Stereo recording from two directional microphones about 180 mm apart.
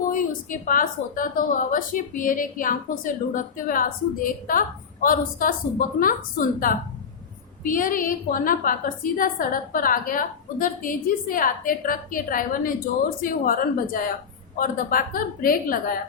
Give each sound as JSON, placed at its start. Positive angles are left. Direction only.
{"t": 0.1, "sound": "a woman's voice", "side_deg": 50}